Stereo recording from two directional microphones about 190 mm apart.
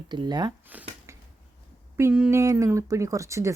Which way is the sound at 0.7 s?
10° right (ahead or behind).